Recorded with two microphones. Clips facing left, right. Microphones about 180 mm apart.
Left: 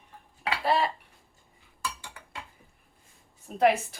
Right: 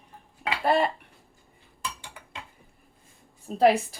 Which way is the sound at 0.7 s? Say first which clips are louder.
Right 3 dB; 50° right (ahead or behind).